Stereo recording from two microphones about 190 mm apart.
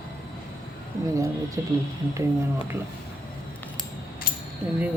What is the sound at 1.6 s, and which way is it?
Speech, 15° right (ahead or behind).